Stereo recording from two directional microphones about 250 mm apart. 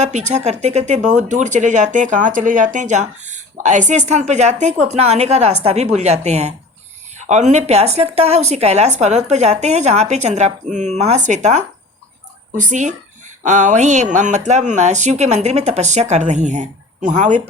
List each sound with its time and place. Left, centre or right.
0.0 s speech: right